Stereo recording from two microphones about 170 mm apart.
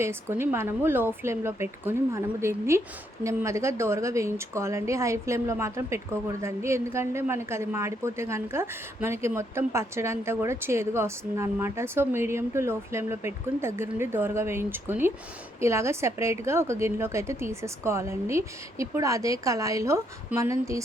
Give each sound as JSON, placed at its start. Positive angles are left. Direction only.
{"t": 0.0, "sound": "a woman's voice", "side_deg": -15}